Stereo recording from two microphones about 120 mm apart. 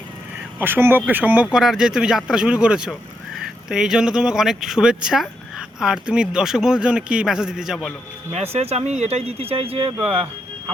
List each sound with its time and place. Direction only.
0.6 s speech: 20° right (ahead or behind); by 7.9 s centre (ahead or behind)
8.3 s speech: 65° right (ahead or behind)